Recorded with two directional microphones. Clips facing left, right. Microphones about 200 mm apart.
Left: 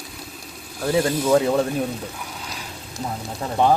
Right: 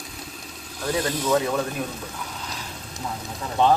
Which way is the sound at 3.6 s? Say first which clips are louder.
Left 1 dB; 10° left (ahead or behind).